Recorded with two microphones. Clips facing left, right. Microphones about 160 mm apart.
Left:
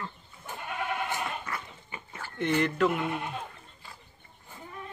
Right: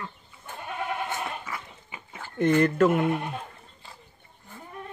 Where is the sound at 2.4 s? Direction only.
40° right (ahead or behind).